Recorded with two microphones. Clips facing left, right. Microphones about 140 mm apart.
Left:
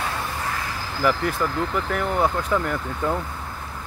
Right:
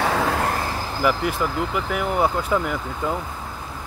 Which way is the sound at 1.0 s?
10° right (ahead or behind).